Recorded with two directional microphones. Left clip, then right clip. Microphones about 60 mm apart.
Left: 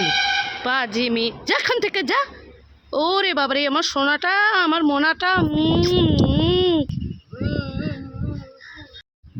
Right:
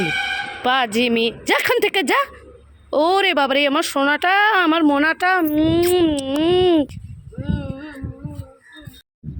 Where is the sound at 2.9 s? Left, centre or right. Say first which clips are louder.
Right 4 dB; right.